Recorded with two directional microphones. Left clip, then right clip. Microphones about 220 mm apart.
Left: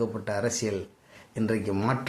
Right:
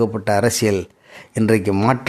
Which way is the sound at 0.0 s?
45° right (ahead or behind).